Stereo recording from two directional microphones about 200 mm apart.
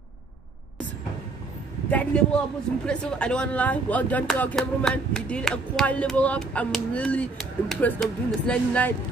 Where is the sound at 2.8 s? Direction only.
5° left (ahead or behind).